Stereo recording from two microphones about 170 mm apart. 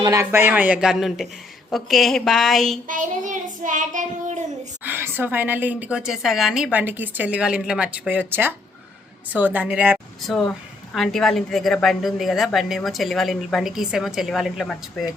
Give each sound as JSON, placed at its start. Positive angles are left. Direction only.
{"t": 0.0, "sound": "a woman's voice", "side_deg": -15}
{"t": 2.8, "sound": "child singing", "side_deg": -50}
{"t": 4.8, "sound": "a woman's voice", "side_deg": -10}